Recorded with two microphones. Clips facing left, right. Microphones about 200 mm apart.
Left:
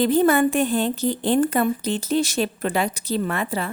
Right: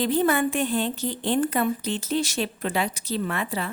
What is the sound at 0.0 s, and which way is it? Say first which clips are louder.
A woman's voice: left 5 dB; 45° left (ahead or behind).